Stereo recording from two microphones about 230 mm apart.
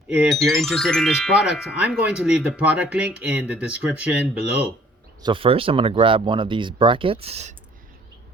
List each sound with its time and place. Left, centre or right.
0.1 s speech: centre
5.2 s speech: right